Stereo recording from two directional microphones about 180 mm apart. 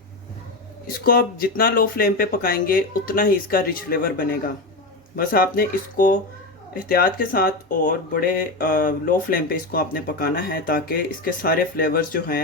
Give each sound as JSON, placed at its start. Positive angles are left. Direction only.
{"t": 0.9, "sound": "speech", "side_deg": 55}